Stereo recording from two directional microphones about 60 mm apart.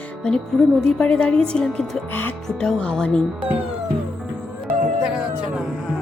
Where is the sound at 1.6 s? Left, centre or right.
Centre.